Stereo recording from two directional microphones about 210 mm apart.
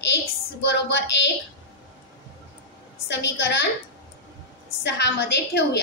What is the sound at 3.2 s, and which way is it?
Speech, 55° left (ahead or behind).